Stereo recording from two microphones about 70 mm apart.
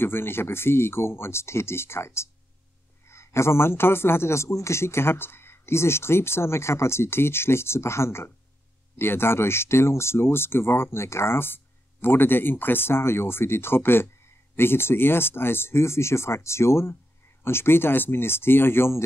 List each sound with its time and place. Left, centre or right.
0.0 s speech: left